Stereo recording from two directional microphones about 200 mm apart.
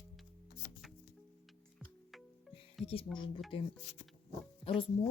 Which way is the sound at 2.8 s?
25° left (ahead or behind).